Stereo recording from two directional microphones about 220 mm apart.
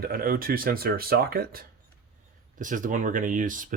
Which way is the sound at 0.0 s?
40° right (ahead or behind).